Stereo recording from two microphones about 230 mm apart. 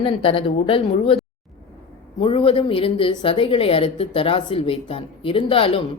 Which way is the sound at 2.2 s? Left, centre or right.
Left.